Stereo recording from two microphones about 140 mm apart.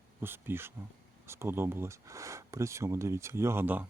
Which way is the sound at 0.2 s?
15° right (ahead or behind).